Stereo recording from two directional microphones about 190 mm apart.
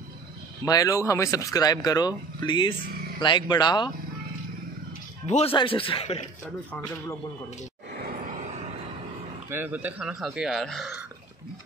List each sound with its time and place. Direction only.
0.7 s speech: 20° left (ahead or behind)
5.2 s speech: 35° left (ahead or behind)
8.0 s a sound: 45° right (ahead or behind)
9.5 s speech: 10° right (ahead or behind)